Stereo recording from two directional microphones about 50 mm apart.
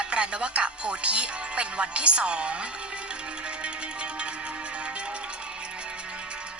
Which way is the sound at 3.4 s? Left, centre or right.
Right.